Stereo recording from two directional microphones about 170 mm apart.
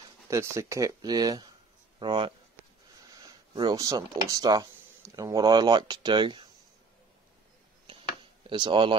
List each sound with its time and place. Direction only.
0.3 s speech: 15° right (ahead or behind)
8.5 s speech: 30° right (ahead or behind)